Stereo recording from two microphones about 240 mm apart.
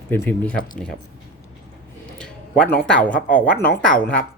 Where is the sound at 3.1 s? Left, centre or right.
Left.